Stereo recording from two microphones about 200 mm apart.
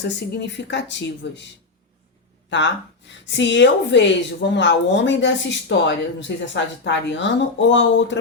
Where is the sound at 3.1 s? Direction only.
65° left (ahead or behind).